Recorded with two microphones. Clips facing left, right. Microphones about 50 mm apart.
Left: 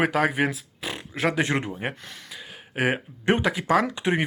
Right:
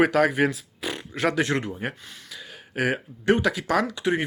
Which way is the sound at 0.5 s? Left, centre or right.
Centre.